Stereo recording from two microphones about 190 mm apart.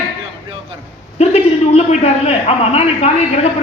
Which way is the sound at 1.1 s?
35° left (ahead or behind).